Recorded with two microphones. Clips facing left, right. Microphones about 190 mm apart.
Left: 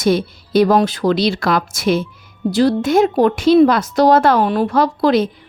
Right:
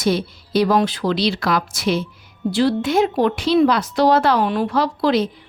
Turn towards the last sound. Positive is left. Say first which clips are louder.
# left 4 dB
turn(degrees=50)  # may be behind; listen again after turning